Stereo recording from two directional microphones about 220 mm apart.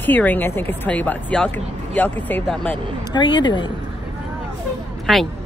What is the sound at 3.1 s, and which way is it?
Speech, 20° left (ahead or behind).